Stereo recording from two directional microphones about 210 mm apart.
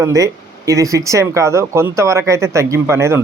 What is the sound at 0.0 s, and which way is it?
Speech, 15° right (ahead or behind).